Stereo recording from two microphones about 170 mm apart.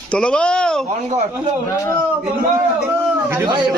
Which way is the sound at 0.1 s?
5° left (ahead or behind).